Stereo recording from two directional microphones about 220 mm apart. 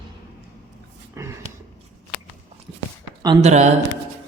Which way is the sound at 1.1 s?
15° right (ahead or behind).